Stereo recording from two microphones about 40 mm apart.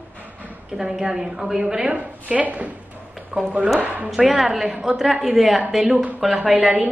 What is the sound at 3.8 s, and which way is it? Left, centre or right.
Speech, right.